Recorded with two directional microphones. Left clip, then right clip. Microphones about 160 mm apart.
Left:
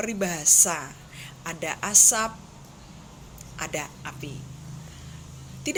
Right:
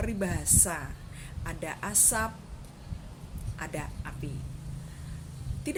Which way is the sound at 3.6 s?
15° right (ahead or behind).